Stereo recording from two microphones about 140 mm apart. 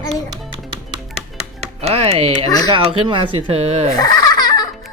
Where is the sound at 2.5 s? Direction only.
25° left (ahead or behind).